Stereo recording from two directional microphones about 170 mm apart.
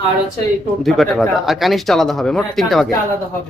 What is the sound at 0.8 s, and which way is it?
Speech, centre (ahead or behind).